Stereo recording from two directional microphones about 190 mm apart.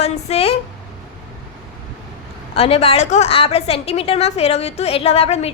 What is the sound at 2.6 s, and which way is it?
A woman's voice, 30° left (ahead or behind).